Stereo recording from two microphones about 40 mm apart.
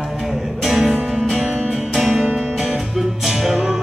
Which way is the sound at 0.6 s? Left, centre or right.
Centre.